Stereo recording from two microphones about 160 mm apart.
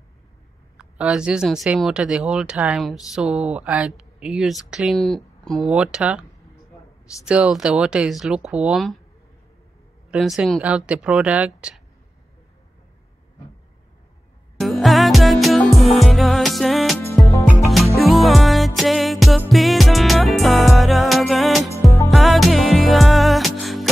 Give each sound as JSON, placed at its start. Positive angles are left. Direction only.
{"t": 0.7, "sound": "speech", "side_deg": -5}
{"t": 7.2, "sound": "speech", "side_deg": -5}
{"t": 10.1, "sound": "speech", "side_deg": -5}
{"t": 14.6, "sound": "music", "side_deg": 0}
{"t": 17.2, "sound": "music", "side_deg": 15}
{"t": 17.5, "sound": "music", "side_deg": 0}
{"t": 21.8, "sound": "music", "side_deg": 20}
{"t": 22.1, "sound": "music", "side_deg": 0}